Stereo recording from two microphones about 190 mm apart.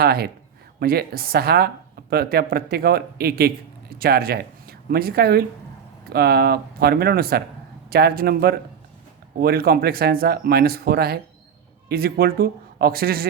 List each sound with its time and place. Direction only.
0.0 s a woman's voice: 55° right (ahead or behind)